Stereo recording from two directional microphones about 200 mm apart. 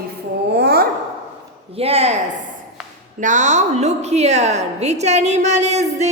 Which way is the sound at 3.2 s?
40° right (ahead or behind).